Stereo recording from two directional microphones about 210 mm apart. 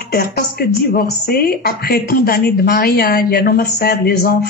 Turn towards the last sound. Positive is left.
turn(degrees=50)  # may be behind; listen again after turning